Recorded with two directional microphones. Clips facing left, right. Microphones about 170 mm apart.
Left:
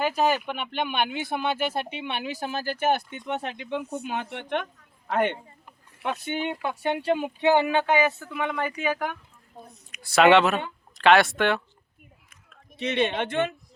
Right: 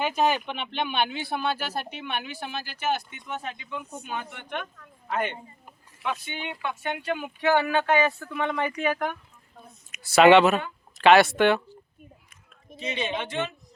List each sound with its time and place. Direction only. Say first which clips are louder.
0.0 s a man's voice: left 1 dB; 5° left (ahead or behind); by 5.4 s 65° left (ahead or behind)
6.0 s speech: left 4 dB; 50° left (ahead or behind); by 11.6 s centre (ahead or behind)
12.7 s speech: left 5 dB; 65° left (ahead or behind)